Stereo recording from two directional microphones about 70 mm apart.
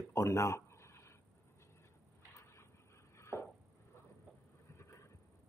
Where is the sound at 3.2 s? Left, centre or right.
Left.